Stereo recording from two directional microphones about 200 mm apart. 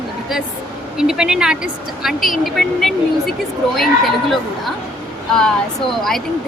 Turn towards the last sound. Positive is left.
turn(degrees=0)  # may be behind; listen again after turning